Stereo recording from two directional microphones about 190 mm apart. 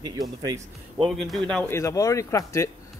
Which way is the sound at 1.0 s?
Centre (ahead or behind).